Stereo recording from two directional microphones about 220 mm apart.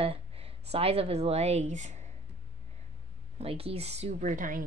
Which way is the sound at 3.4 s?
25° right (ahead or behind).